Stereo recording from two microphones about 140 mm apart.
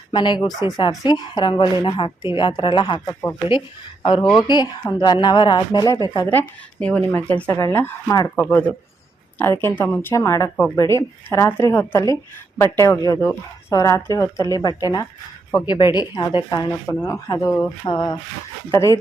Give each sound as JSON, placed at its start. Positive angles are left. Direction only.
{"t": 0.1, "sound": "speech", "side_deg": 35}
{"t": 6.7, "sound": "speech", "side_deg": 10}
{"t": 16.8, "sound": "speech", "side_deg": 20}